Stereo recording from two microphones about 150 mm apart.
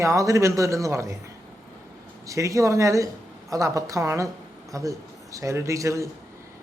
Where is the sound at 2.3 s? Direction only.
20° right (ahead or behind).